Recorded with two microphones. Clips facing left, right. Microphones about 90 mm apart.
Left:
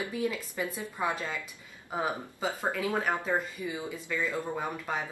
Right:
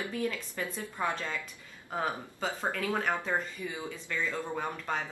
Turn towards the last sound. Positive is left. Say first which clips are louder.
# left 1 dB
turn(degrees=10)  # may be behind; listen again after turning